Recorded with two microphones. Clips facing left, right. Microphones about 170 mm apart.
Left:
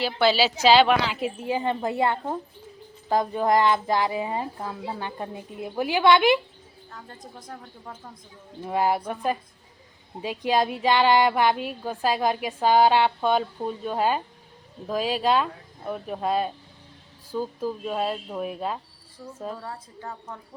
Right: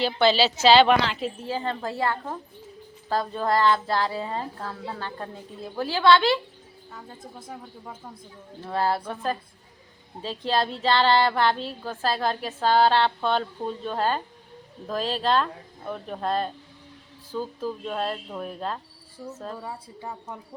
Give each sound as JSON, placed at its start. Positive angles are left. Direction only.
{"t": 0.0, "sound": "speech", "side_deg": 10}
{"t": 7.3, "sound": "speech", "side_deg": -5}
{"t": 8.6, "sound": "speech", "side_deg": 15}
{"t": 19.6, "sound": "speech", "side_deg": -10}